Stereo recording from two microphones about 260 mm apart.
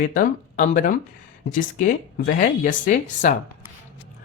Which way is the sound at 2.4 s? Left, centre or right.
Left.